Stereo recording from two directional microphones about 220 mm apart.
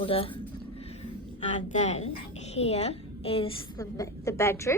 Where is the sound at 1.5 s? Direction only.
30° left (ahead or behind); by 4.7 s 15° left (ahead or behind).